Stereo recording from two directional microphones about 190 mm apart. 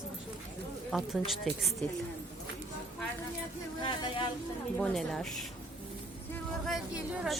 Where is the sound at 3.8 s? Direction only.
25° left (ahead or behind).